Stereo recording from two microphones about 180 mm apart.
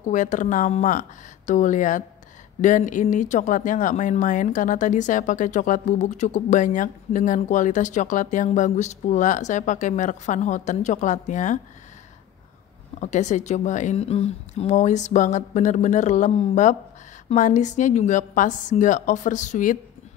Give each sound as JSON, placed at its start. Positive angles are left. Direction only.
{"t": 0.0, "sound": "speech", "side_deg": 45}
{"t": 13.0, "sound": "speech", "side_deg": 40}